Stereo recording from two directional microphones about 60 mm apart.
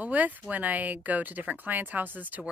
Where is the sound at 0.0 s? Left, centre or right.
Right.